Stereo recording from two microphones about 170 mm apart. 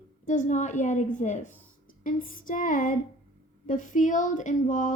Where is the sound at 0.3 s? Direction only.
45° left (ahead or behind).